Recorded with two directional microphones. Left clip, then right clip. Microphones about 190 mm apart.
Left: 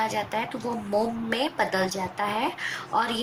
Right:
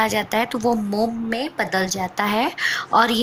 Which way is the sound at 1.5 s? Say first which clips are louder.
Right 3 dB; 50° right (ahead or behind).